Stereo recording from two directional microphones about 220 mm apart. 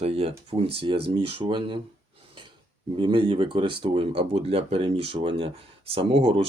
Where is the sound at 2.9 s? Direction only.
20° right (ahead or behind).